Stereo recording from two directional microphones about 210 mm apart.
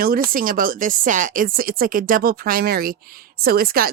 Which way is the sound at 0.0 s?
45° right (ahead or behind).